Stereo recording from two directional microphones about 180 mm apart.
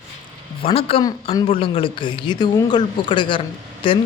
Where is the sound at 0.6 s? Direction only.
30° left (ahead or behind).